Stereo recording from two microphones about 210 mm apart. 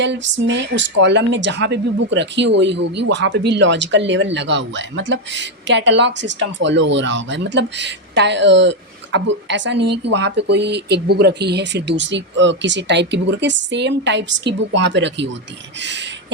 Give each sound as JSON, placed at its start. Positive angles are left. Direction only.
{"t": 0.0, "sound": "speech", "side_deg": -60}